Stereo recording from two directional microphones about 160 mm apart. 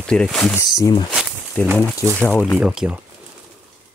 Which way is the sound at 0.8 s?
25° left (ahead or behind).